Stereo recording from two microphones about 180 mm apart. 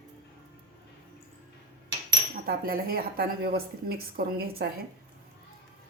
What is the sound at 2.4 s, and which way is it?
Speech, 55° right (ahead or behind).